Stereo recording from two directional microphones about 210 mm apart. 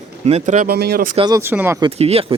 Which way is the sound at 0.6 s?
50° right (ahead or behind).